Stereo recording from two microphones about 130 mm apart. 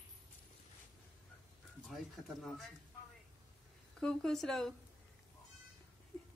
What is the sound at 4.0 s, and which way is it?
Speech, 5° left (ahead or behind).